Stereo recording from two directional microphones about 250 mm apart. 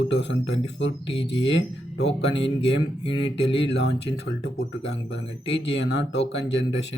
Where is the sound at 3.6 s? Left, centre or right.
Left.